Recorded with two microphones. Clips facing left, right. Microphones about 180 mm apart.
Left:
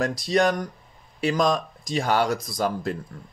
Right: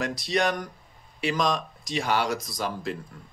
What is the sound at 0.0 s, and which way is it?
Speech, 40° left (ahead or behind).